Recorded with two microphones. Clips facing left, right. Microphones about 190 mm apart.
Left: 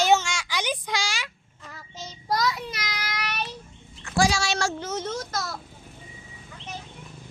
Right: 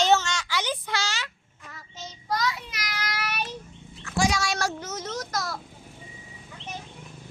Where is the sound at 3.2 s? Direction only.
10° right (ahead or behind).